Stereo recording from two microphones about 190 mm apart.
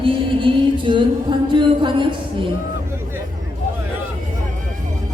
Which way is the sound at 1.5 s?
25° right (ahead or behind).